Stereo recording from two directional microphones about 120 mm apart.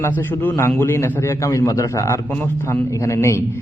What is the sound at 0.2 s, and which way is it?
A man's voice, 15° left (ahead or behind).